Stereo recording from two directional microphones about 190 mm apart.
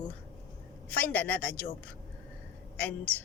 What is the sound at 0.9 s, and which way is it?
Speech, 10° left (ahead or behind).